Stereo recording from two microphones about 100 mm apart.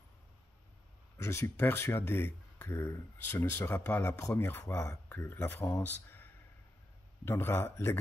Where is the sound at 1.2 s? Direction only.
30° left (ahead or behind).